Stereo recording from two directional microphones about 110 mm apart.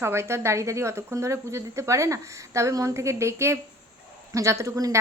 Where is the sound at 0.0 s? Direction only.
25° right (ahead or behind).